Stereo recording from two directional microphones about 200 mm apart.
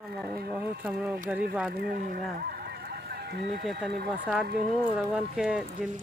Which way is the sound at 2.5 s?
50° right (ahead or behind).